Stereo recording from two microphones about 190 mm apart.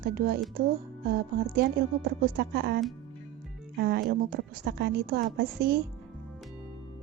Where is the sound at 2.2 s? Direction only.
55° right (ahead or behind).